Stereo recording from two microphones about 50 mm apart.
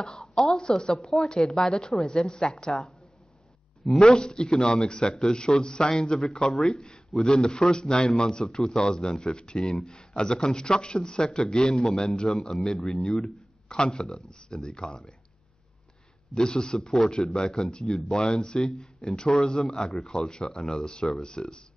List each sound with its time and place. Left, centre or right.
0.0 s a sound: centre
0.6 s a man's voice: centre
4.0 s a man's voice: centre
16.3 s a man's voice: centre